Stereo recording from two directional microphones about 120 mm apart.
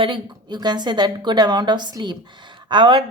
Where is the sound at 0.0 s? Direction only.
40° right (ahead or behind).